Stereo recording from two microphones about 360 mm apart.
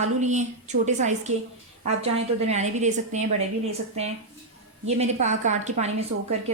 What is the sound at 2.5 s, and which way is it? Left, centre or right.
Speech, centre.